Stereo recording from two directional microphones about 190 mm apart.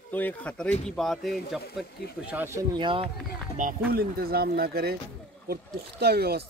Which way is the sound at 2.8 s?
25° right (ahead or behind).